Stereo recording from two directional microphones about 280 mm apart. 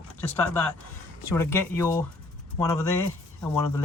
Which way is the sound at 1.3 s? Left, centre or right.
Centre.